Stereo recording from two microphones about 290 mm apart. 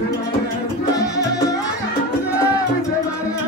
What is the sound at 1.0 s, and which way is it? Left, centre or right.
Music, centre.